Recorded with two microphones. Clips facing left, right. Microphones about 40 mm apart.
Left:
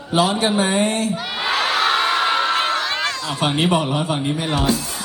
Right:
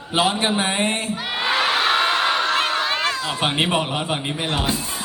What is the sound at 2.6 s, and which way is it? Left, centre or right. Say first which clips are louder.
Crowd: left 1 dB; centre.